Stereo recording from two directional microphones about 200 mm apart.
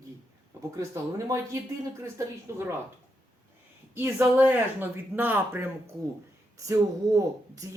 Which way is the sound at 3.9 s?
10° right (ahead or behind).